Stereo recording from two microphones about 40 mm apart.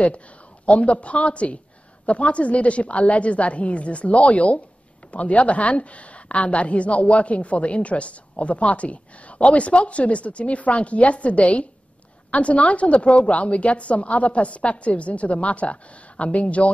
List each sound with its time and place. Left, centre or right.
0.0 s a woman's voice: left